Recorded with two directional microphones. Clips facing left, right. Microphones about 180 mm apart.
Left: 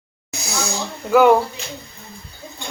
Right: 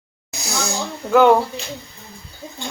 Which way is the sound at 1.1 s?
5° left (ahead or behind).